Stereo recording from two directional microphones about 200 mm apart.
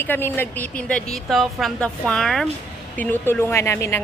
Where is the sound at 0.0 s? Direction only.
10° left (ahead or behind).